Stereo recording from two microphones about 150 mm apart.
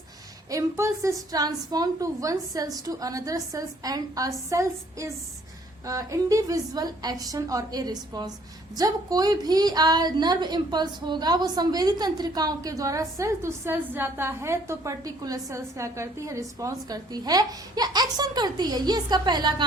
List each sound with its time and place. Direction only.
0.5 s a woman's voice: 20° right (ahead or behind)